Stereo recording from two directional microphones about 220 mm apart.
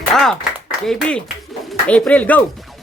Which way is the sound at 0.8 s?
5° left (ahead or behind).